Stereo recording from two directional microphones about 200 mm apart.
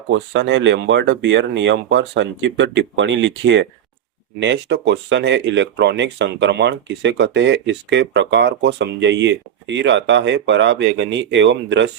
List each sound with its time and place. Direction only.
0.1 s speech: 65° right (ahead or behind)